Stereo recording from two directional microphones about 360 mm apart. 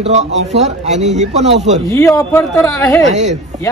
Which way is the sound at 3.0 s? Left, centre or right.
Centre.